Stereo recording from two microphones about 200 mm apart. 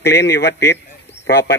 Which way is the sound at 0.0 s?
55° left (ahead or behind).